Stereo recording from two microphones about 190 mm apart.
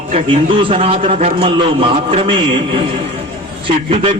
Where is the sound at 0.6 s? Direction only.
30° right (ahead or behind).